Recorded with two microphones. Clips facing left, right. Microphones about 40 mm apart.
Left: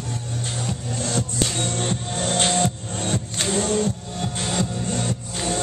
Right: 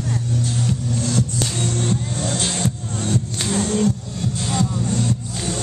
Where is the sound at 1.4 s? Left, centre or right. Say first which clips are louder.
Right 1 dB; left.